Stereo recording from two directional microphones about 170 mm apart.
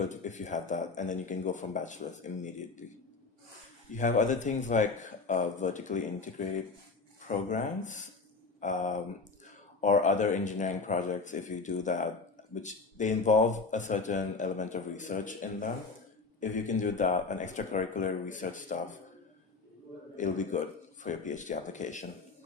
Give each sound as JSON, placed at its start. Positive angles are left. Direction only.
{"t": 0.0, "sound": "speech", "side_deg": 45}
{"t": 3.9, "sound": "speech", "side_deg": 45}
{"t": 7.4, "sound": "speech", "side_deg": 45}
{"t": 16.4, "sound": "speech", "side_deg": 50}
{"t": 20.1, "sound": "speech", "side_deg": 45}